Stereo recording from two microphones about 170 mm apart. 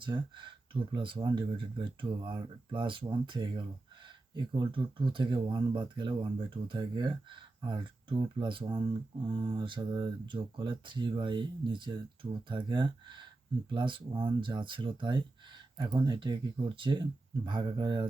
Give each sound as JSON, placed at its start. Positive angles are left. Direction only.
{"t": 0.0, "sound": "speech", "side_deg": -30}